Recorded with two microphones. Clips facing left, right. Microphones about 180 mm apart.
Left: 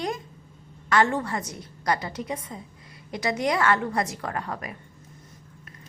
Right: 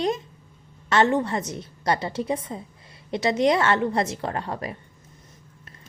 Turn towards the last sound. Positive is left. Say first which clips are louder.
# right 3 dB
turn(degrees=-30)  # may be behind; listen again after turning